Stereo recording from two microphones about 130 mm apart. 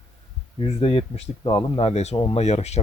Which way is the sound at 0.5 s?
50° left (ahead or behind).